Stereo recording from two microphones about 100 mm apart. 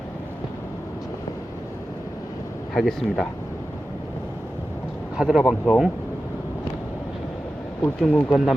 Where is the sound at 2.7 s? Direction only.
5° left (ahead or behind).